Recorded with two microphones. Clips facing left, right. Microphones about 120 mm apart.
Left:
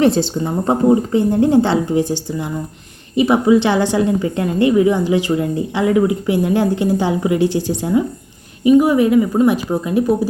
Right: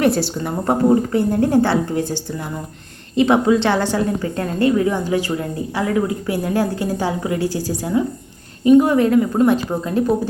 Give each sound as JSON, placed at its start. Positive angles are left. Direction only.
{"t": 0.0, "sound": "speech", "side_deg": 25}
{"t": 3.2, "sound": "a woman's voice", "side_deg": 10}
{"t": 8.6, "sound": "a woman's voice", "side_deg": 5}